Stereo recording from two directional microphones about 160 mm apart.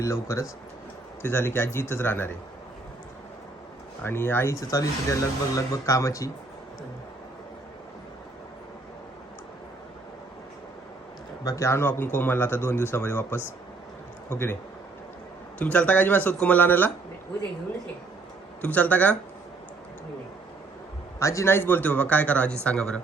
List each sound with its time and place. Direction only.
0.0 s speech: 20° left (ahead or behind)
4.0 s speech: 15° left (ahead or behind)
11.4 s speech: 20° left (ahead or behind)
18.6 s speech: 10° left (ahead or behind)
21.2 s speech: 20° left (ahead or behind)